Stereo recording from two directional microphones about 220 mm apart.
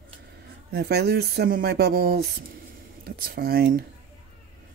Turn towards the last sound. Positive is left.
turn(degrees=-45)  # may be behind; listen again after turning